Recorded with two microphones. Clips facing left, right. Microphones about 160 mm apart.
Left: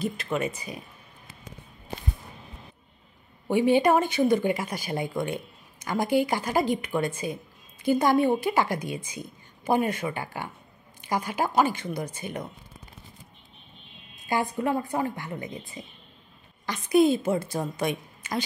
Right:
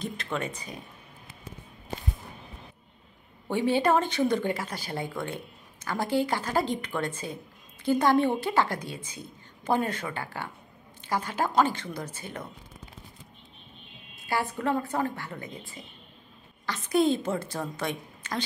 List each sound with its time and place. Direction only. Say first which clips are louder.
0.0 s speech: left 4 dB; 5° left (ahead or behind)
3.4 s speech: left 4 dB; 15° left (ahead or behind)
14.2 s speech: left 2 dB; 15° left (ahead or behind)